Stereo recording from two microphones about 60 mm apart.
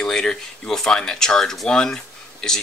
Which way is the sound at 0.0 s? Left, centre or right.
Centre.